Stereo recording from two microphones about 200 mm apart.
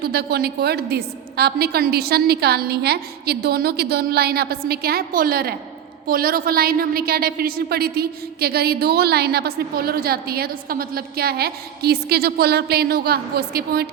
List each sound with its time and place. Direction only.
0.0 s a woman's voice: 50° right (ahead or behind)